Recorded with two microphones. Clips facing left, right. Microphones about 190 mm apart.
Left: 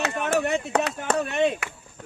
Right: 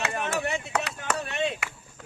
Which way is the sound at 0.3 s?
55° left (ahead or behind).